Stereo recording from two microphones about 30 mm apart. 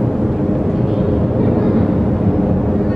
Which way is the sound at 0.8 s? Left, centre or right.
Centre.